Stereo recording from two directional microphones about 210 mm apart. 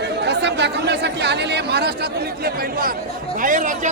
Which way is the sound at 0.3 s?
55° right (ahead or behind).